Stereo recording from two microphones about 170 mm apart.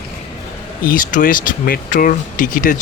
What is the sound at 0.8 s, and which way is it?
Speech, 55° left (ahead or behind).